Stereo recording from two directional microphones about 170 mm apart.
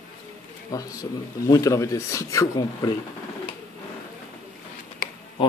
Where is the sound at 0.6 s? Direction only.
20° left (ahead or behind).